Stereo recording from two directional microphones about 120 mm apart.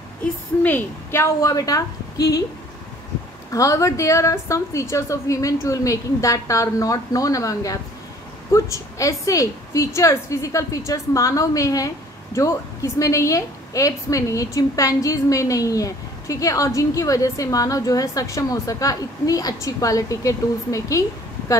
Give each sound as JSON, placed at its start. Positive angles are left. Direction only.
{"t": 0.6, "sound": "a woman's voice", "side_deg": 15}
{"t": 3.5, "sound": "a woman's voice", "side_deg": 25}